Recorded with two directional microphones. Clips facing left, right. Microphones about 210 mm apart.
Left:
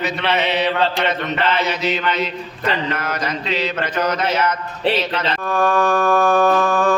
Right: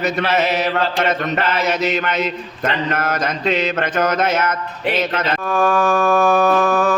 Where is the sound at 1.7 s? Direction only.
45° right (ahead or behind).